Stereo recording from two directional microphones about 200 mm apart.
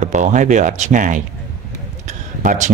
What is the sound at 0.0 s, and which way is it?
Speech, 35° right (ahead or behind).